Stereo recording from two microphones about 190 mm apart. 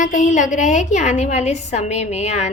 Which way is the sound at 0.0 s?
45° left (ahead or behind).